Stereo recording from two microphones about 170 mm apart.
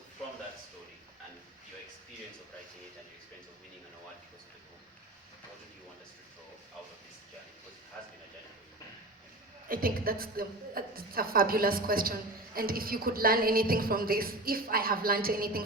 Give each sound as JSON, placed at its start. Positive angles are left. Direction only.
{"t": 9.6, "sound": "a woman's voice", "side_deg": -55}